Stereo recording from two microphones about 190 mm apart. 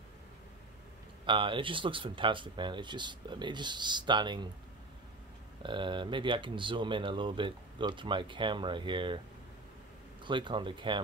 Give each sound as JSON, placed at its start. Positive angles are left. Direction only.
{"t": 1.2, "sound": "speech", "side_deg": -25}
{"t": 5.6, "sound": "speech", "side_deg": -25}
{"t": 10.2, "sound": "speech", "side_deg": -25}